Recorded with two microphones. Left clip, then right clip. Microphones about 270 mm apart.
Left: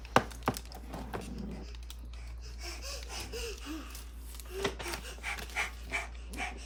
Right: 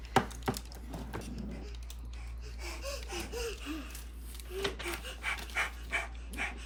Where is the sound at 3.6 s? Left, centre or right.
Centre.